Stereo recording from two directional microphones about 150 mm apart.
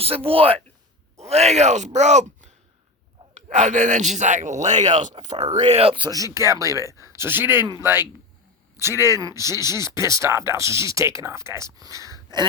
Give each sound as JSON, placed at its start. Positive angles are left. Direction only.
{"t": 0.0, "sound": "speech", "side_deg": -40}
{"t": 8.8, "sound": "speech", "side_deg": -15}